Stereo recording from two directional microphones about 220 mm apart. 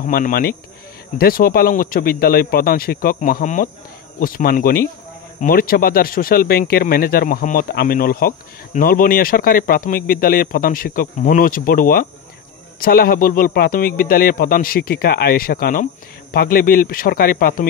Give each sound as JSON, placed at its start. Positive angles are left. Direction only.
{"t": 0.0, "sound": "speech", "side_deg": 40}